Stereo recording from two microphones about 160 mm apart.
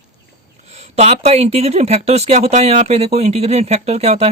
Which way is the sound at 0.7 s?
40° right (ahead or behind).